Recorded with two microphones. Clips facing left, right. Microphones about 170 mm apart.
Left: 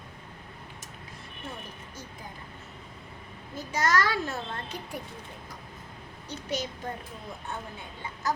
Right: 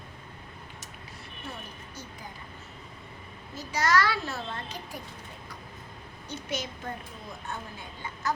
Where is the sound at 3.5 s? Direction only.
50° left (ahead or behind).